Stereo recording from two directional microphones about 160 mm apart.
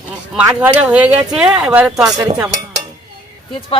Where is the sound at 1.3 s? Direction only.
5° right (ahead or behind).